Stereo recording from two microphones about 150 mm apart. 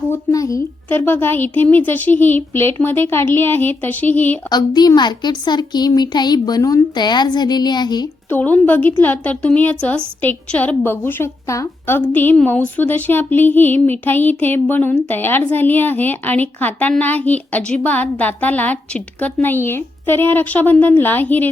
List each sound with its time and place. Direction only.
0.1 s speech: 20° left (ahead or behind)
4.4 s a child's voice: 25° left (ahead or behind)
8.3 s speech: 10° left (ahead or behind)